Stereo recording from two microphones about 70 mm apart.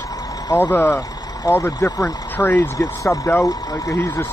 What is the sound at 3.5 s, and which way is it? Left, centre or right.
Speech, left.